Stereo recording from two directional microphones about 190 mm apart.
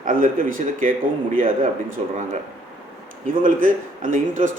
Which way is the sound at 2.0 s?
35° right (ahead or behind).